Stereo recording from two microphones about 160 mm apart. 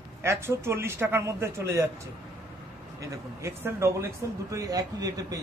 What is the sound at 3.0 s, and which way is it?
Speech, 20° right (ahead or behind).